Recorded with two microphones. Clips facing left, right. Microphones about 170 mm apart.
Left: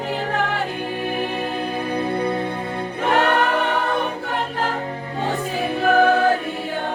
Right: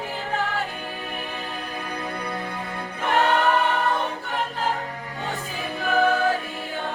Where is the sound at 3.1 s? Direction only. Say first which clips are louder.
Left 1 dB; 65° left (ahead or behind).